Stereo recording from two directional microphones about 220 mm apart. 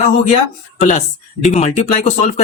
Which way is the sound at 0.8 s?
30° left (ahead or behind).